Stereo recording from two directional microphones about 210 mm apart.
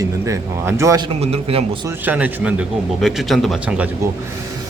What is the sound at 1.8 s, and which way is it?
Speech, 10° right (ahead or behind).